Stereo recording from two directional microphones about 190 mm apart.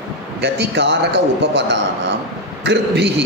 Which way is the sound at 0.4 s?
65° right (ahead or behind).